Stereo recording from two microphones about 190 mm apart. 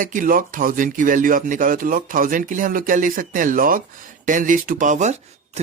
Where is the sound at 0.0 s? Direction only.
45° right (ahead or behind).